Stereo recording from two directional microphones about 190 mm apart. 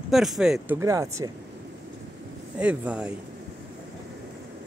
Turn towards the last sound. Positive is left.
turn(degrees=-5)  # may be behind; listen again after turning